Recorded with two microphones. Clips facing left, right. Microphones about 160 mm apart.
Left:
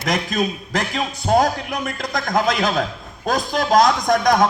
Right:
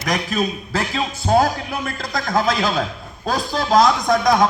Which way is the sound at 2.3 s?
15° left (ahead or behind).